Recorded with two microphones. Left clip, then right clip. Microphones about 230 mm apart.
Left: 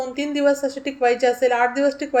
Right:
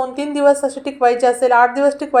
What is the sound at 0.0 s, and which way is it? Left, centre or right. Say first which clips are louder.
A woman's voice: right 5 dB; centre.